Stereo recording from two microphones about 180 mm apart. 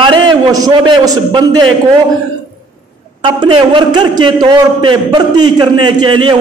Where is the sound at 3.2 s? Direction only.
30° right (ahead or behind).